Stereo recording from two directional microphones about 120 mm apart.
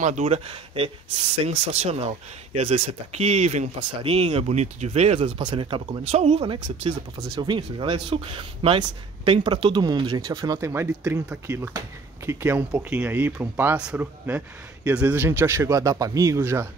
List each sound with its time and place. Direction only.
0.0 s speech: 85° right
0.5 s speech: 50° right (ahead or behind)
1.4 s speech: 65° right (ahead or behind)
7.3 s speech: 40° right (ahead or behind); by 16.6 s 20° right (ahead or behind)